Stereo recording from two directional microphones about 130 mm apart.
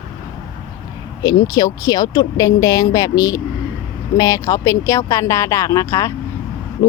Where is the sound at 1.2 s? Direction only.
30° left (ahead or behind).